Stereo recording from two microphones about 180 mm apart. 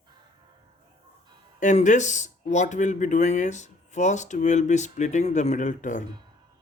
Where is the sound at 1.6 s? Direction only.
45° left (ahead or behind).